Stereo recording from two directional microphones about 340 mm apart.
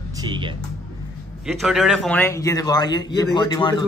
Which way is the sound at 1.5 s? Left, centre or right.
Centre.